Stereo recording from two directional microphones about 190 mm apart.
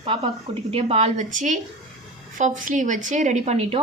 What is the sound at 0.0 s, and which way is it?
A woman's voice, 30° right (ahead or behind).